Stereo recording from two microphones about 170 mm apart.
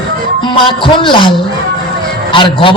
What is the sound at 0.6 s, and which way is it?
Speech, 30° left (ahead or behind).